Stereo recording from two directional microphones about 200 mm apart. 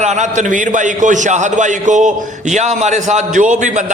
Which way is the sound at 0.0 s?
35° right (ahead or behind).